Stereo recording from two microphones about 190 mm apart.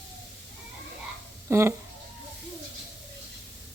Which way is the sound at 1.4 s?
15° right (ahead or behind).